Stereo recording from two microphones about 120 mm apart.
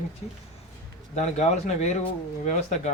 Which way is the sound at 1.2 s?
75° left (ahead or behind).